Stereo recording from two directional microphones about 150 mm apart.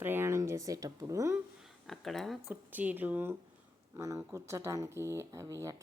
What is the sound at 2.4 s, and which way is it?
Speech, 10° right (ahead or behind).